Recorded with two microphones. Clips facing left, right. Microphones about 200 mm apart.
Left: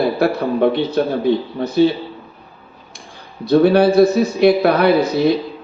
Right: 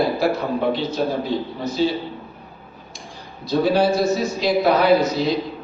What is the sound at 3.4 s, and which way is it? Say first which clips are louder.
A man's voice: left 6 dB; 60° left (ahead or behind).